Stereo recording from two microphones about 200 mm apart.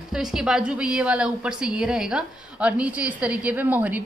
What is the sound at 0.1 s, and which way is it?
A woman's voice, 5° right (ahead or behind).